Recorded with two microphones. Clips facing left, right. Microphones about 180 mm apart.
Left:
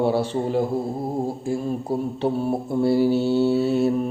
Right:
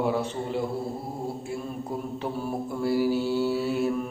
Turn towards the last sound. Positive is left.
turn(degrees=30)  # may be behind; listen again after turning